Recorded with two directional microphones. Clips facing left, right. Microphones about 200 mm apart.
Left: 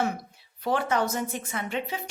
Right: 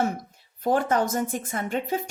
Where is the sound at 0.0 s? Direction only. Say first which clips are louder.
Right 2 dB; 45° right (ahead or behind).